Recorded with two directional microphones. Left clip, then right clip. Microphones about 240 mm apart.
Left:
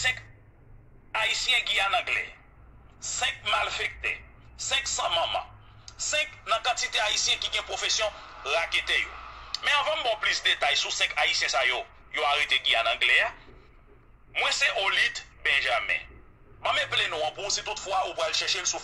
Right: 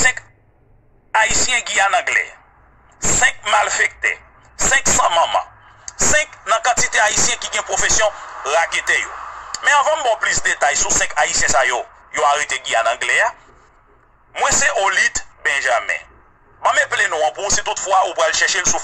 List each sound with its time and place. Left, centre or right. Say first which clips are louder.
1.1 s a man's voice: right 9 dB; right
14.3 s a man's voice: right 9 dB; right